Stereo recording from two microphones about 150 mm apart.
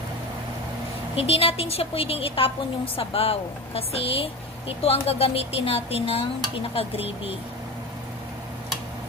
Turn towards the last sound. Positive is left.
turn(degrees=40)  # may be behind; listen again after turning